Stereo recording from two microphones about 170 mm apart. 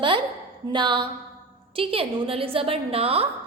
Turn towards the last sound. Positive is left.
turn(degrees=-35)  # may be behind; listen again after turning